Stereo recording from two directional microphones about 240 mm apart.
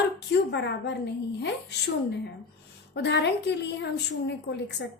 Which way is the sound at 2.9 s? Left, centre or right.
Left.